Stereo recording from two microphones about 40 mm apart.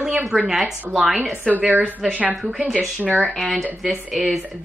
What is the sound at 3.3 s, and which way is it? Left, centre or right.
Speech, centre.